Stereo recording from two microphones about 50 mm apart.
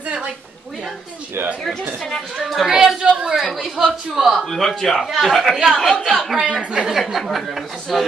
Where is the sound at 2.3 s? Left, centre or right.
Centre.